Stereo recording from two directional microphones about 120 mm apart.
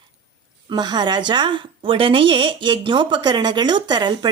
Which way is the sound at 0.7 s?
35° right (ahead or behind).